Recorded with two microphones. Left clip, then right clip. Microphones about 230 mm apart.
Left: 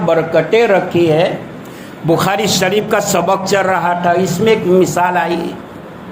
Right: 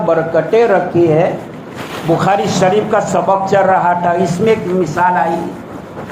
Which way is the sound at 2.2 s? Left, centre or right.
Left.